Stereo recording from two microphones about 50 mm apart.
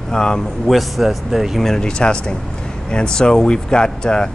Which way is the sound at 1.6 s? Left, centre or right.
Centre.